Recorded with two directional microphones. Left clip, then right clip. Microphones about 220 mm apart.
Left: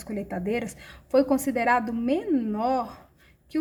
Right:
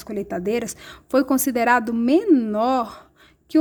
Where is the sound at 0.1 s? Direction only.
45° right (ahead or behind).